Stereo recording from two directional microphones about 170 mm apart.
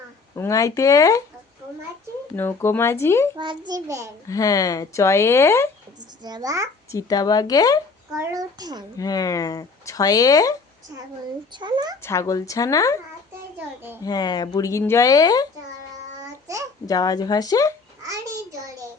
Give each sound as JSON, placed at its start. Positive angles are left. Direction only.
{"t": 0.3, "sound": "speech", "side_deg": 20}
{"t": 2.3, "sound": "speech", "side_deg": 15}
{"t": 3.3, "sound": "a child's voice", "side_deg": -30}
{"t": 4.3, "sound": "speech", "side_deg": 20}
{"t": 6.2, "sound": "a child's voice", "side_deg": -25}
{"t": 6.9, "sound": "speech", "side_deg": 20}
{"t": 8.2, "sound": "a child's voice", "side_deg": -20}
{"t": 9.0, "sound": "speech", "side_deg": 20}
{"t": 11.5, "sound": "a child's voice", "side_deg": -25}
{"t": 12.0, "sound": "speech", "side_deg": 20}
{"t": 13.6, "sound": "a child's voice", "side_deg": -10}
{"t": 14.0, "sound": "speech", "side_deg": 25}
{"t": 16.2, "sound": "child singing", "side_deg": -20}
{"t": 16.8, "sound": "speech", "side_deg": 20}